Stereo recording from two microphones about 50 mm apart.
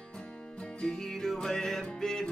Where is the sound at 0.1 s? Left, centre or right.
Left.